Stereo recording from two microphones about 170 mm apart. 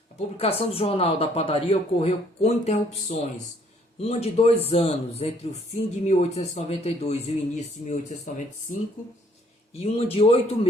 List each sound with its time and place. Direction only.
0.3 s a man's voice: 35° left (ahead or behind)
9.7 s a man's voice: 35° left (ahead or behind)